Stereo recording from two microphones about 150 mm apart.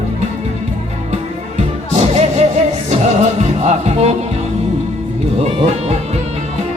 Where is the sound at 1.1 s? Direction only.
45° right (ahead or behind).